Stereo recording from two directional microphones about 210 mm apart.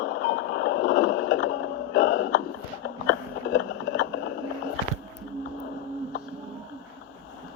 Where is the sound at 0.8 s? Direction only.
40° left (ahead or behind).